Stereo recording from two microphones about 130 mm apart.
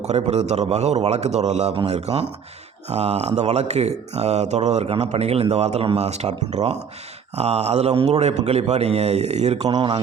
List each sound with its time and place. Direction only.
0.0 s speech: 60° right (ahead or behind)
9.6 s a man's voice: 35° right (ahead or behind)